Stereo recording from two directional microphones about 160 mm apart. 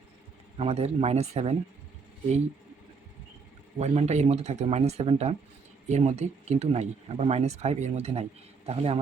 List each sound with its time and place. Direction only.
0.5 s speech: 40° right (ahead or behind)
3.8 s speech: 40° right (ahead or behind)